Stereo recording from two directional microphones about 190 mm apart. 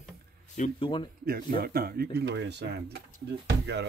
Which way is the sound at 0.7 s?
25° left (ahead or behind).